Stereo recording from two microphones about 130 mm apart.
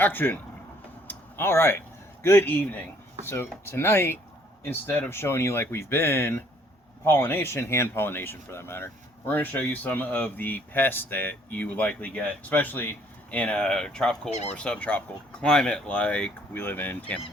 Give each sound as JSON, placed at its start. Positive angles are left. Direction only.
{"t": 0.0, "sound": "speech", "side_deg": 15}
{"t": 1.0, "sound": "a sound", "side_deg": 20}
{"t": 2.2, "sound": "speech", "side_deg": 15}